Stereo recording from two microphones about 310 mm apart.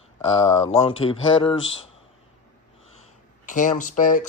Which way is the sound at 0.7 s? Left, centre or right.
Centre.